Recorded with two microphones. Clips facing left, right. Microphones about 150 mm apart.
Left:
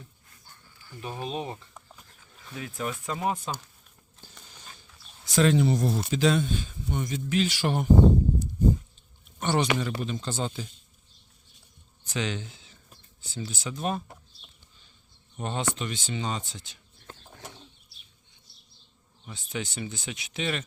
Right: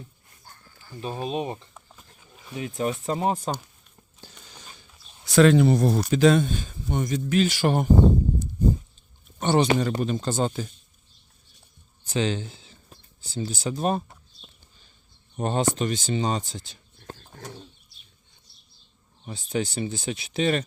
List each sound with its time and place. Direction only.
0.4 s a sound: 50° right (ahead or behind)
0.9 s speech: 25° right (ahead or behind)
1.7 s goat: 5° right (ahead or behind)
2.2 s speech: 20° right (ahead or behind); by 3.5 s 35° right (ahead or behind)
5.2 s speech: 65° right (ahead or behind); by 7.9 s 50° right (ahead or behind)
9.4 s speech: 30° right (ahead or behind)
9.7 s speech: 45° right (ahead or behind)
12.0 s speech: 30° right (ahead or behind)
15.4 s speech: 40° right (ahead or behind)
19.2 s speech: 35° right (ahead or behind)